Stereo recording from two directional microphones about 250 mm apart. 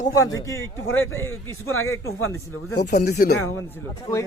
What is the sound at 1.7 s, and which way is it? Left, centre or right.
Speech, left.